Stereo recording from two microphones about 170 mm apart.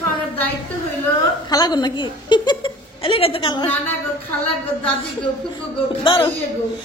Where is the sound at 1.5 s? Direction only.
25° left (ahead or behind).